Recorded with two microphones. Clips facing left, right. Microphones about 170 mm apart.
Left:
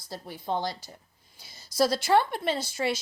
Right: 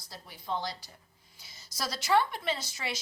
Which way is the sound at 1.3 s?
30° left (ahead or behind).